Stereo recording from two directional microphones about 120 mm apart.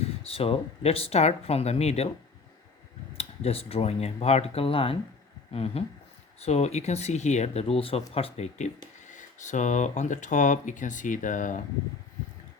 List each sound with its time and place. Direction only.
0.2 s speech: 55° left (ahead or behind)
3.2 s speech: 55° left (ahead or behind)
6.4 s speech: 65° left (ahead or behind)
9.1 s speech: 90° left